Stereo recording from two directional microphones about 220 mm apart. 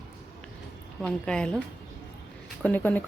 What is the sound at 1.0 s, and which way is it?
Speech, 5° left (ahead or behind).